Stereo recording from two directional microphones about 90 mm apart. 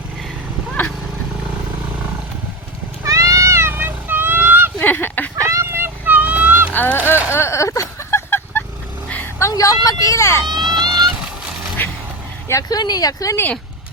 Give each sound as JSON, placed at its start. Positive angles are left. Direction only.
{"t": 0.7, "sound": "vehicle", "side_deg": 15}
{"t": 3.0, "sound": "a sound", "side_deg": -35}
{"t": 4.8, "sound": "fowl", "side_deg": 20}
{"t": 5.4, "sound": "vehicle", "side_deg": -35}
{"t": 6.7, "sound": "a sound", "side_deg": 25}
{"t": 9.2, "sound": "vehicle", "side_deg": 35}
{"t": 10.4, "sound": "vehicle", "side_deg": -55}
{"t": 11.8, "sound": "a sound", "side_deg": 20}
{"t": 12.6, "sound": "speech", "side_deg": 50}